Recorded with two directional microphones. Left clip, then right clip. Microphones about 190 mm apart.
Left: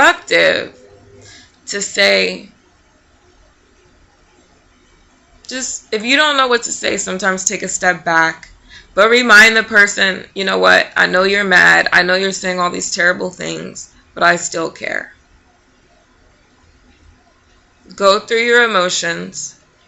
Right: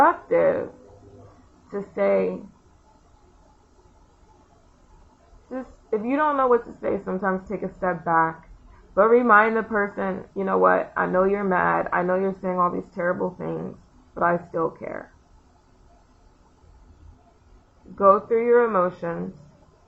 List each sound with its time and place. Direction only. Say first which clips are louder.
0.0 s speech: left 7 dB; 15° left (ahead or behind)
1.7 s speech: left 9 dB; 20° left (ahead or behind)
5.5 s speech: left 7 dB; 20° left (ahead or behind)
17.9 s speech: left 5 dB; 25° left (ahead or behind)